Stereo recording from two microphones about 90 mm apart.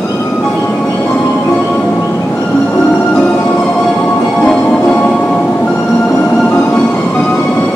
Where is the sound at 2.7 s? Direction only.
10° left (ahead or behind).